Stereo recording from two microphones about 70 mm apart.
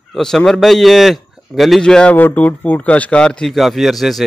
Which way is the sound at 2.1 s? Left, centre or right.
Left.